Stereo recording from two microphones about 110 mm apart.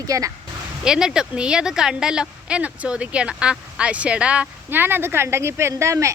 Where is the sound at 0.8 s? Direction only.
5° right (ahead or behind).